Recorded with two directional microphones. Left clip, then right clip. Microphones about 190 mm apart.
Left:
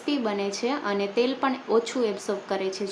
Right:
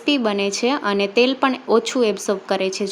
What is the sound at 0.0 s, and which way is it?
A woman's voice, 45° right (ahead or behind).